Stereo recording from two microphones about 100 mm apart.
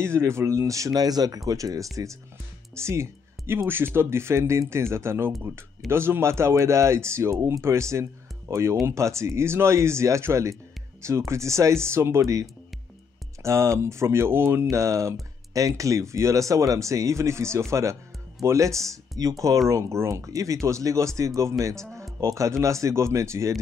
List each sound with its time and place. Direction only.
0.0 s speech: 25° right (ahead or behind)